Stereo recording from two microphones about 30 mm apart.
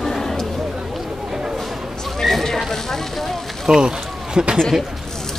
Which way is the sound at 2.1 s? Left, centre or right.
Centre.